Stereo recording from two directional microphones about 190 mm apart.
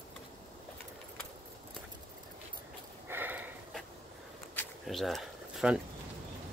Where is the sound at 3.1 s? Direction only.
10° right (ahead or behind).